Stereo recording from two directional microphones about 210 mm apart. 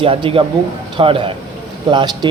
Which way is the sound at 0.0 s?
25° right (ahead or behind).